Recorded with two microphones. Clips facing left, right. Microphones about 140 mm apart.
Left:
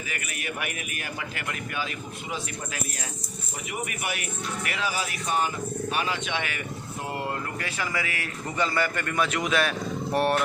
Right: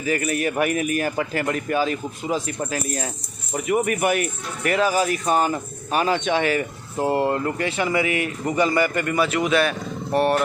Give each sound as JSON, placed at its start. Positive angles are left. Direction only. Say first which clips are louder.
{"t": 0.0, "sound": "speech", "louder": "right 13 dB", "side_deg": -35}